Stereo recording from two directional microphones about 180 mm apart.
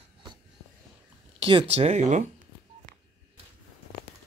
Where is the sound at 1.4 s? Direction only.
30° right (ahead or behind).